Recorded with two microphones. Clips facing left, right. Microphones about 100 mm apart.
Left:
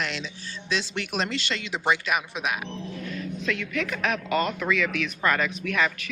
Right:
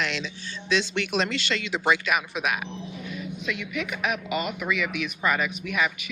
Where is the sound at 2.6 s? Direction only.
15° right (ahead or behind).